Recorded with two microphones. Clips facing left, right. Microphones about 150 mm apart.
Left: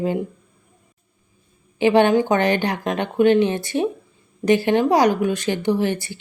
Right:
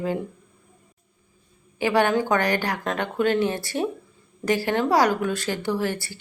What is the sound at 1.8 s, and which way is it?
A woman's voice, 20° left (ahead or behind).